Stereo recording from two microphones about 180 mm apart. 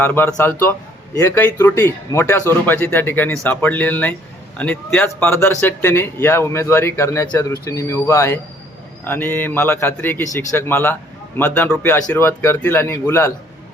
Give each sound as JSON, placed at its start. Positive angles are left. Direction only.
{"t": 0.0, "sound": "a man's voice", "side_deg": 10}